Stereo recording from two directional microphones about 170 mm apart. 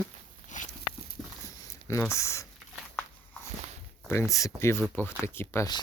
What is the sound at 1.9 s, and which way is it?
Speech, 15° left (ahead or behind).